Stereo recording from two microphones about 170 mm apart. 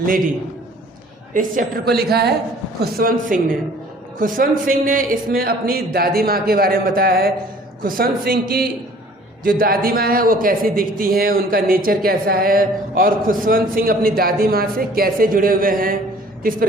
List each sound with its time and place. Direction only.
1.3 s a man's voice: 55° right (ahead or behind); by 2.3 s 70° right (ahead or behind)
2.8 s a man's voice: 55° right (ahead or behind)